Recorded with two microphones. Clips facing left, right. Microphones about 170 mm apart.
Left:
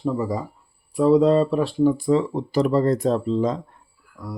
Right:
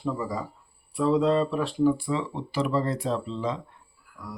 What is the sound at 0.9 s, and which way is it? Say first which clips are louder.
Speech: left 6 dB; 40° left (ahead or behind).